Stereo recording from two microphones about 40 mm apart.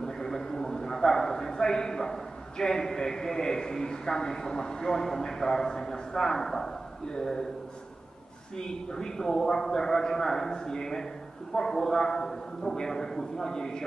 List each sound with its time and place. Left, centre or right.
0.0 s a man's voice: centre
8.5 s a man's voice: centre